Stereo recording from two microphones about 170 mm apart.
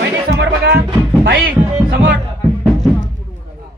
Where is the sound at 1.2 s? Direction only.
60° right (ahead or behind).